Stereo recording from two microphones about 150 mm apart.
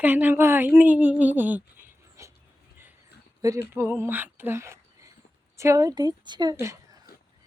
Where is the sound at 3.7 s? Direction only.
15° right (ahead or behind).